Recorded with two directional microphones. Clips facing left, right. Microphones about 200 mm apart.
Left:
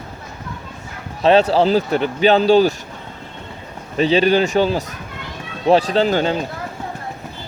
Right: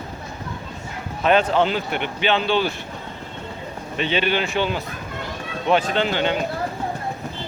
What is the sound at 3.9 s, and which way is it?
Speech, 35° left (ahead or behind).